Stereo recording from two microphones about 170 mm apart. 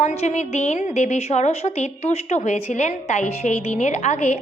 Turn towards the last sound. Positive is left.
turn(degrees=40)  # may be behind; listen again after turning